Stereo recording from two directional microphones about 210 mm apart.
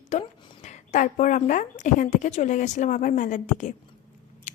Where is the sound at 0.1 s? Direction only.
30° left (ahead or behind).